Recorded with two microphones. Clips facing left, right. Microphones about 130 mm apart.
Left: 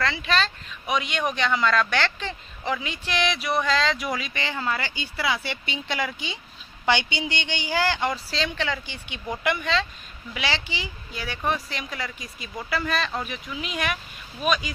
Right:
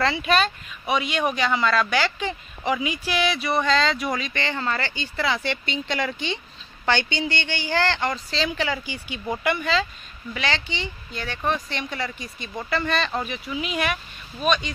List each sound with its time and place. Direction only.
0.0 s speech: 20° right (ahead or behind)
0.8 s speech: centre (ahead or behind)